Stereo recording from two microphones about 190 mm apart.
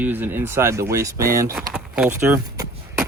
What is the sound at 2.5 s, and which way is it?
Vehicle, 15° right (ahead or behind).